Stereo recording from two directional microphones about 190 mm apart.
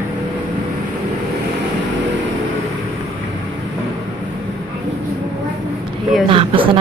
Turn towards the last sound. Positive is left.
turn(degrees=-25)  # may be behind; listen again after turning